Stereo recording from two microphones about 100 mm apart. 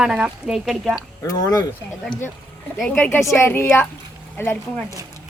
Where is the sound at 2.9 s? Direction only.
15° left (ahead or behind).